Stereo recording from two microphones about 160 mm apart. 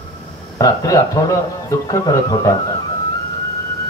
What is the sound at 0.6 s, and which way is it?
Speech, 20° left (ahead or behind).